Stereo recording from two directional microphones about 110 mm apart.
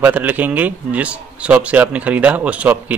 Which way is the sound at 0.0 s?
15° right (ahead or behind).